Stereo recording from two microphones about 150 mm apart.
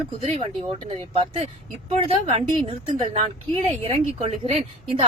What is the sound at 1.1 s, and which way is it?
A woman's voice, 40° right (ahead or behind).